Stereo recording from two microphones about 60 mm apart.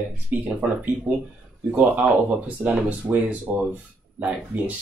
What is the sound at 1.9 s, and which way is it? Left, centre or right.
Speech, right.